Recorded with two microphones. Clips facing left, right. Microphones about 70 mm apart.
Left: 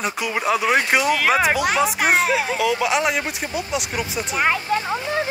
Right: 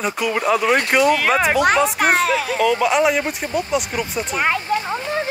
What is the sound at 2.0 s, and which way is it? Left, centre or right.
Speech, right.